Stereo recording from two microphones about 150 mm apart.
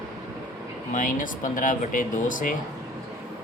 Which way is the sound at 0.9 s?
60° left (ahead or behind).